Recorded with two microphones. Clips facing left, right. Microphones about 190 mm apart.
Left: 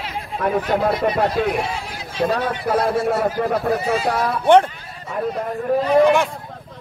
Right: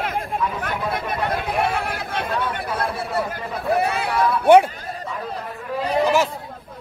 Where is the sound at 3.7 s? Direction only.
60° right (ahead or behind).